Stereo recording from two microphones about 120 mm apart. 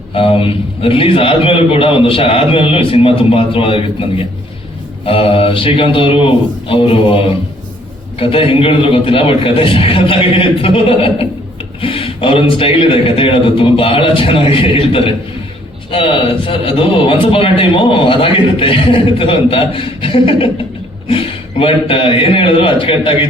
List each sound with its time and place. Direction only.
0.1 s a man's voice: 50° left (ahead or behind)
5.0 s a man's voice: 50° left (ahead or behind)